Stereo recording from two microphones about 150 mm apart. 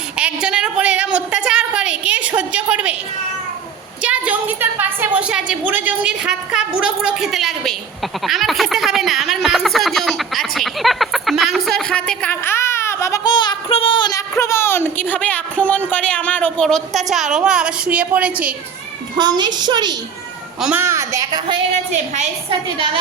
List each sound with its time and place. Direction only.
0.2 s a sound: 5° right (ahead or behind)
4.0 s a woman's voice: 10° right (ahead or behind); by 14.2 s 30° left (ahead or behind)
14.3 s a woman's voice: 20° left (ahead or behind); by 18.5 s 10° right (ahead or behind)
19.1 s a woman's voice: 30° right (ahead or behind)
20.6 s a woman's voice: 10° right (ahead or behind)
21.5 s a woman's voice: 50° right (ahead or behind)